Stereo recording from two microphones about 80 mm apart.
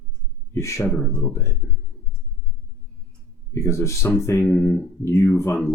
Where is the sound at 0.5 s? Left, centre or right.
Left.